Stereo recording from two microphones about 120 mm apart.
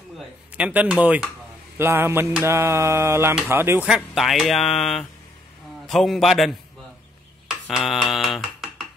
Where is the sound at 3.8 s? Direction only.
5° right (ahead or behind).